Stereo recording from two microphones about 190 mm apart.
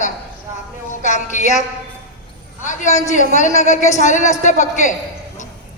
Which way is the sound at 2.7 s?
40° left (ahead or behind).